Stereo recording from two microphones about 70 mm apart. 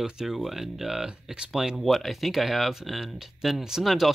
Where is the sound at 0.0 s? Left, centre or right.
Centre.